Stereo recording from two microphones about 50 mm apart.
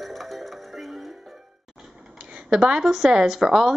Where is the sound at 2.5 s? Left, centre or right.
Centre.